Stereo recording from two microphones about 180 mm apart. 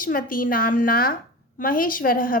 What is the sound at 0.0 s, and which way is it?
A woman's voice, 50° left (ahead or behind).